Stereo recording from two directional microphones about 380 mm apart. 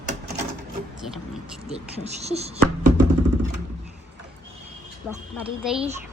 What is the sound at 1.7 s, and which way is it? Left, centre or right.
Speech, centre.